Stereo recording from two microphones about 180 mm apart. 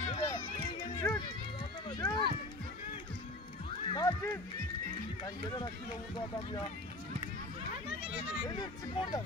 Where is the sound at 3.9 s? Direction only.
20° left (ahead or behind).